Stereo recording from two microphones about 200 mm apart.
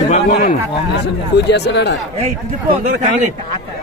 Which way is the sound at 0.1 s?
40° left (ahead or behind).